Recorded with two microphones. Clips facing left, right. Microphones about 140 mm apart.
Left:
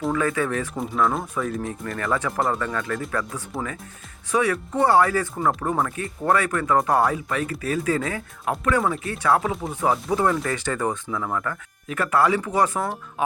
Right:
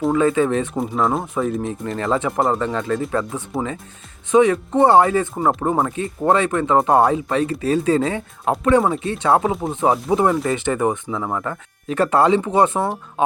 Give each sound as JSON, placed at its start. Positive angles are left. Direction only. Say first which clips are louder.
{"t": 0.1, "sound": "speech", "louder": "right 7 dB", "side_deg": -25}